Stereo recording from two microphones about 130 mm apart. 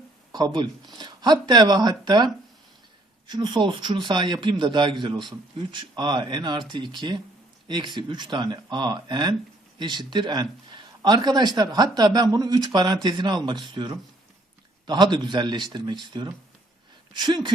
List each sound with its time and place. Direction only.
0.3 s speech: 35° right (ahead or behind)